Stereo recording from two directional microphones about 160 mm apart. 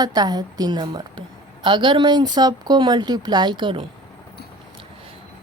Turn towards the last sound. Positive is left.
turn(degrees=-30)  # may be behind; listen again after turning